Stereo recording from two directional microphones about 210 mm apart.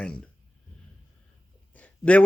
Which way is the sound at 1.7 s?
5° left (ahead or behind).